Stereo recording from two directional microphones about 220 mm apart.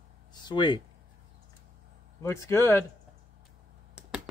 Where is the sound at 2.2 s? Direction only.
15° left (ahead or behind).